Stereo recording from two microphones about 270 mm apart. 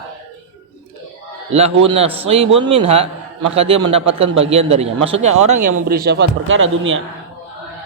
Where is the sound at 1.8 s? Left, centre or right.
Right.